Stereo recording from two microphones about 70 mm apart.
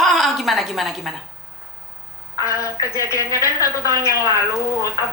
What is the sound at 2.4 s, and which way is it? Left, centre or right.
Speech, left.